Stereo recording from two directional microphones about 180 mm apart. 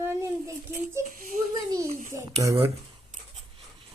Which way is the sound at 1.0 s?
45° right (ahead or behind).